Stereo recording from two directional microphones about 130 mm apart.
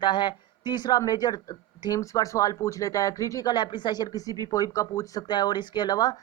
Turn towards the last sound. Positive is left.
turn(degrees=30)  # may be behind; listen again after turning